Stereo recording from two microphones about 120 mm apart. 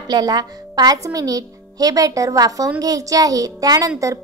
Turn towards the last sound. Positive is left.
turn(degrees=-30)  # may be behind; listen again after turning